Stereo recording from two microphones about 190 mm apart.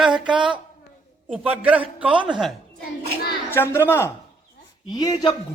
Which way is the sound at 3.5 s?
10° left (ahead or behind).